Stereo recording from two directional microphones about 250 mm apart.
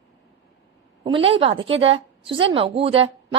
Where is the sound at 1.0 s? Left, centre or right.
Right.